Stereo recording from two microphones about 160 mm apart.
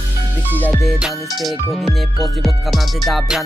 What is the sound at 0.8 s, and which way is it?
Music, centre (ahead or behind).